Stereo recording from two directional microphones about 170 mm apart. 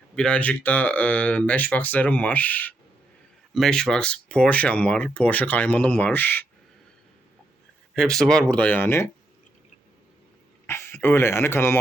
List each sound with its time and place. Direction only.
0.2 s speech: 5° left (ahead or behind)
7.9 s speech: 5° left (ahead or behind)
10.7 s speech: 15° left (ahead or behind)